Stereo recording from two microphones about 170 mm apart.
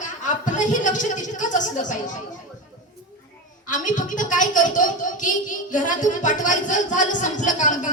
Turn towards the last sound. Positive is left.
turn(degrees=45)  # may be behind; listen again after turning